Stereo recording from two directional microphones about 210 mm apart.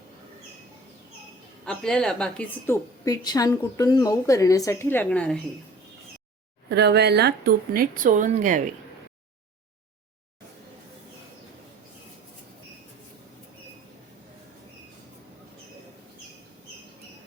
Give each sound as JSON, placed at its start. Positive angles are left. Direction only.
{"t": 1.6, "sound": "a woman's voice", "side_deg": 5}
{"t": 6.7, "sound": "speech", "side_deg": -50}